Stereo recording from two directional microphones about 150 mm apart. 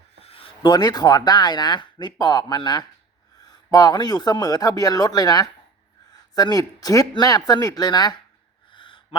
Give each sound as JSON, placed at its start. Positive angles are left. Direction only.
{"t": 0.3, "sound": "speech", "side_deg": 35}
{"t": 8.7, "sound": "gasp", "side_deg": 35}